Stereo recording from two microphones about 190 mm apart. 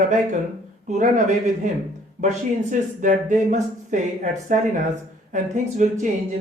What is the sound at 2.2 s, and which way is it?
Speech, 40° right (ahead or behind).